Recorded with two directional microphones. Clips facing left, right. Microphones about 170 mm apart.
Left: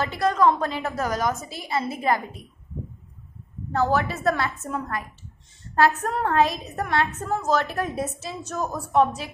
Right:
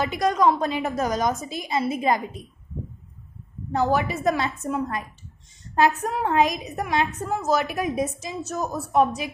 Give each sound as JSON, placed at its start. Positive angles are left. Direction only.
{"t": 0.0, "sound": "a woman's voice", "side_deg": -15}
{"t": 3.7, "sound": "a woman's voice", "side_deg": -15}